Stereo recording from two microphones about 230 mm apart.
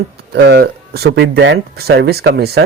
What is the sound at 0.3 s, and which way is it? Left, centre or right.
Speech, right.